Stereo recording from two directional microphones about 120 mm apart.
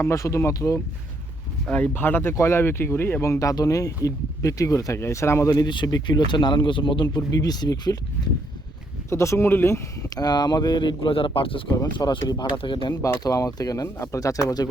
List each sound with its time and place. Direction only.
0.0 s speech: 25° left (ahead or behind)
1.6 s speech: 10° left (ahead or behind); by 7.2 s 40° left (ahead or behind)
7.2 s speech: 30° left (ahead or behind)
9.0 s speech: 25° left (ahead or behind)
10.2 s speech: 35° left (ahead or behind)
12.9 s speech: 25° left (ahead or behind)